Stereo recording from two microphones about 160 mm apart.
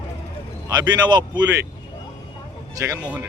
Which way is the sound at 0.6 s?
25° right (ahead or behind).